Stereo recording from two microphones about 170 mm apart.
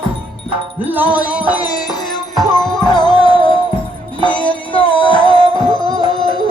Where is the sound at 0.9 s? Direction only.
10° right (ahead or behind).